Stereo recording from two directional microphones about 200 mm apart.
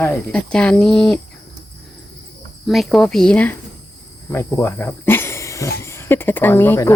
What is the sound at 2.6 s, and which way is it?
Speech, centre (ahead or behind).